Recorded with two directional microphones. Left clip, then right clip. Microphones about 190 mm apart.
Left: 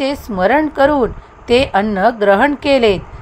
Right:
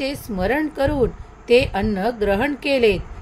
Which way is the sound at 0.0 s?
15° left (ahead or behind).